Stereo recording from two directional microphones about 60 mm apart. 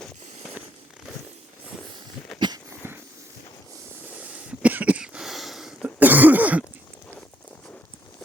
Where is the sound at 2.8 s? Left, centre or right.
Right.